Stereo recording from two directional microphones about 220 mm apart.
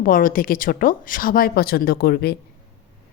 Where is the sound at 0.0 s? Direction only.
40° left (ahead or behind).